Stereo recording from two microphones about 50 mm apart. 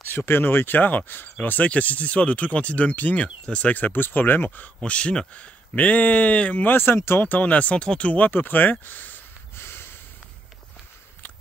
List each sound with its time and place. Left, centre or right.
0.0 s speech: left
1.4 s speech: left
3.7 s speech: left
4.8 s speech: left
8.3 s speech: left
9.6 s snort: left